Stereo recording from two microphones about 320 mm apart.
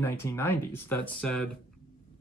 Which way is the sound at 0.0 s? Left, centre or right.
Centre.